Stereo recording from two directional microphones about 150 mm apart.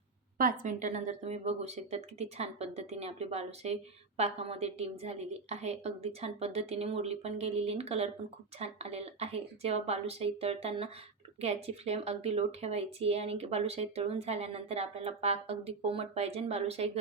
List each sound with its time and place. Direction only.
0.3 s speech: 65° right (ahead or behind); by 17.0 s 45° right (ahead or behind)